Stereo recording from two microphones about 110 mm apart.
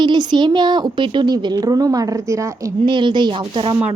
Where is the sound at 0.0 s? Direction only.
40° right (ahead or behind).